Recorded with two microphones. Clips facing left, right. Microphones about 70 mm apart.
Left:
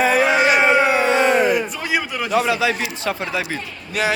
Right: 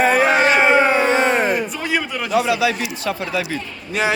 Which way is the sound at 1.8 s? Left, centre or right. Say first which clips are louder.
Even; centre.